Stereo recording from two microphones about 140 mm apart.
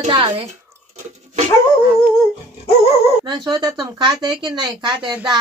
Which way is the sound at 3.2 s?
30° right (ahead or behind).